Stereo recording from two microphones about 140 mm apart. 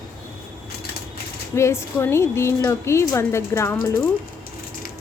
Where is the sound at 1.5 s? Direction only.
20° left (ahead or behind).